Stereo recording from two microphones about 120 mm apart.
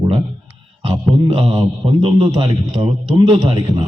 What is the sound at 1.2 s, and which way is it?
A man's voice, 55° right (ahead or behind).